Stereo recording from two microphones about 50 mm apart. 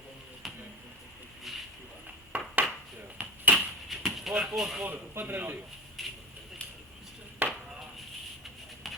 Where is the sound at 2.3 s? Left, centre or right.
Right.